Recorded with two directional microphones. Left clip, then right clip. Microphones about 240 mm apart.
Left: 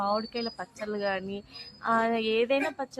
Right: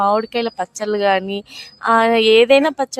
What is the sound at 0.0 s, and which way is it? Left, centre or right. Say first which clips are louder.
Speech: right 13 dB; right.